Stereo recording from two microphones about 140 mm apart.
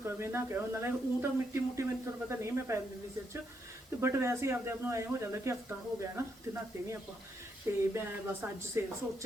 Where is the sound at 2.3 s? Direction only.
20° right (ahead or behind).